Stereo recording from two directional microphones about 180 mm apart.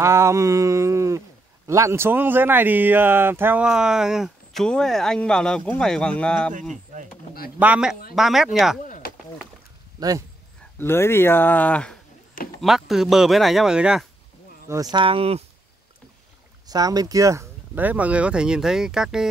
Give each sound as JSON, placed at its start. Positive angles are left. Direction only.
{"t": 0.0, "sound": "speech", "side_deg": -15}
{"t": 7.5, "sound": "speech", "side_deg": -5}
{"t": 8.8, "sound": "chop", "side_deg": 45}
{"t": 9.9, "sound": "speech", "side_deg": -20}
{"t": 10.8, "sound": "speech", "side_deg": 15}
{"t": 14.7, "sound": "speech", "side_deg": -20}
{"t": 16.6, "sound": "speech", "side_deg": -20}